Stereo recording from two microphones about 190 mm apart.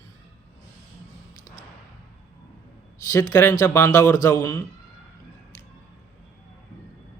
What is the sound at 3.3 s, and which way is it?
Speech, 15° left (ahead or behind).